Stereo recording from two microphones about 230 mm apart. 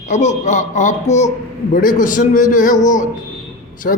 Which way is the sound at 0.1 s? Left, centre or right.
Left.